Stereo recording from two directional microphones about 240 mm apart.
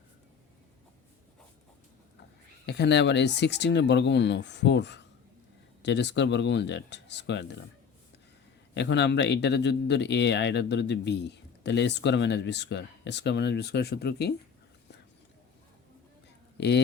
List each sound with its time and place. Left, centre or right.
2.6 s speech: left
8.7 s speech: left
16.6 s speech: left